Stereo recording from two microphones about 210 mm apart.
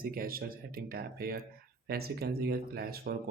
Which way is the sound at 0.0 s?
45° right (ahead or behind).